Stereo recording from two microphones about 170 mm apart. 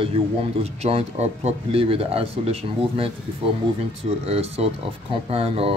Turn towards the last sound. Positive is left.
turn(degrees=-35)  # may be behind; listen again after turning